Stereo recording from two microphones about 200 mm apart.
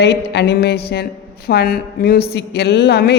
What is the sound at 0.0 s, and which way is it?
A woman's voice, 55° left (ahead or behind).